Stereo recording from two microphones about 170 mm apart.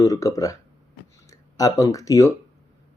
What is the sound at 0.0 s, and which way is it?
Speech, 20° left (ahead or behind).